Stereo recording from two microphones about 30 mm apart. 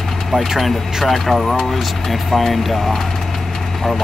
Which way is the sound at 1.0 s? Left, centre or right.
Centre.